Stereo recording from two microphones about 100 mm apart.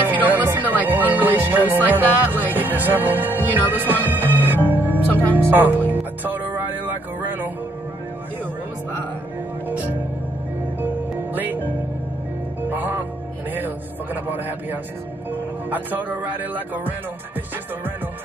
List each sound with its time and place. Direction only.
0.0 s music: 15° right (ahead or behind)
11.3 s music: 20° right (ahead or behind)
14.2 s a man's voice: 20° right (ahead or behind)
15.7 s music: 20° right (ahead or behind)